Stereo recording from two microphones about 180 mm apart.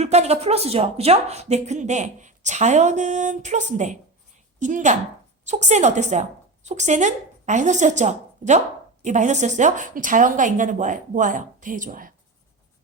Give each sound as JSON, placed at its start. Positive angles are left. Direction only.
{"t": 0.0, "sound": "a woman's voice", "side_deg": -35}